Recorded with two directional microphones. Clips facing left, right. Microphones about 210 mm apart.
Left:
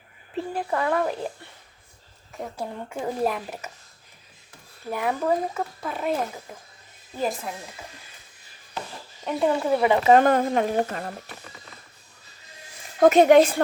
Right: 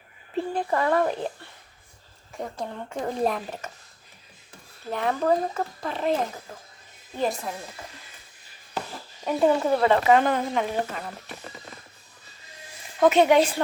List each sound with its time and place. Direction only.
0.5 s speech: centre (ahead or behind)
2.3 s speech: centre (ahead or behind)
4.9 s speech: 10° left (ahead or behind)
7.2 s speech: centre (ahead or behind)
9.2 s speech: centre (ahead or behind)
10.2 s speech: 50° left (ahead or behind)
13.0 s speech: 45° left (ahead or behind)